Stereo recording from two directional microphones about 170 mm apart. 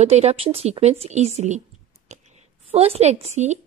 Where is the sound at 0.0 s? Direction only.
40° right (ahead or behind).